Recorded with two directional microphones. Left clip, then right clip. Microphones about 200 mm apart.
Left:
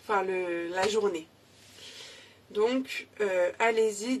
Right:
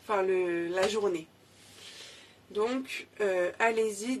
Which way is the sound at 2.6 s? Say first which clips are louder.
Left 3 dB; centre (ahead or behind).